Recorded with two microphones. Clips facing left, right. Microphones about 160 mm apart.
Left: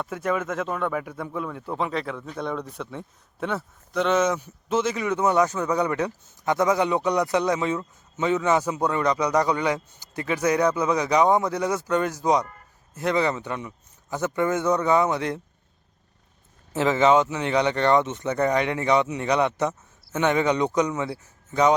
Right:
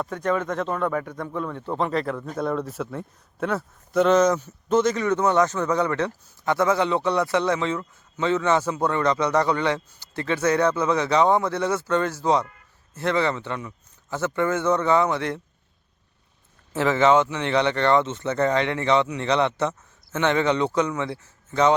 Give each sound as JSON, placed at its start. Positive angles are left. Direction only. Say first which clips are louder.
{"t": 0.0, "sound": "a man's voice", "louder": "right 2 dB", "side_deg": 5}
{"t": 16.7, "sound": "speech", "louder": "even", "side_deg": 20}